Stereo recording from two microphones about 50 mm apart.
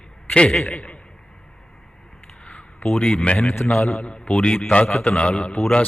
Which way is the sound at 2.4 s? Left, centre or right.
Left.